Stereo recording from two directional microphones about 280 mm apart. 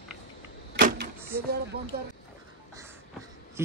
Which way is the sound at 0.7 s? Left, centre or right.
Right.